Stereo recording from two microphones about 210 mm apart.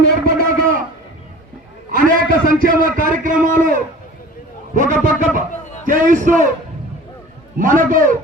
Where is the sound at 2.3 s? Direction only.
40° right (ahead or behind).